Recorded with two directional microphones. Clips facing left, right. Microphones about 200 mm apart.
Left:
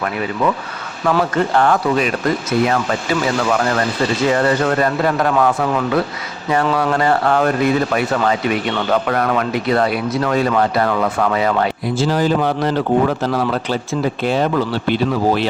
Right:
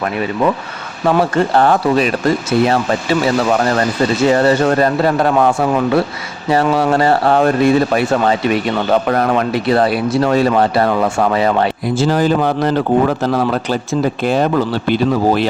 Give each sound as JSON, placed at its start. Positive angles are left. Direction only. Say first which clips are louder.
{"t": 1.0, "sound": "a man's voice", "louder": "right 3 dB", "side_deg": -30}
{"t": 11.9, "sound": "speech", "louder": "right 2 dB", "side_deg": -50}